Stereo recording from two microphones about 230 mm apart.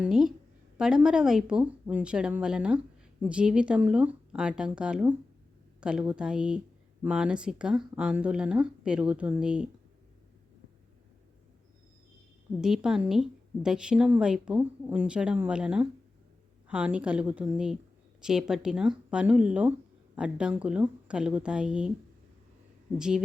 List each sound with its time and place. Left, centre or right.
0.0 s speech: centre
12.6 s speech: centre
23.0 s speech: centre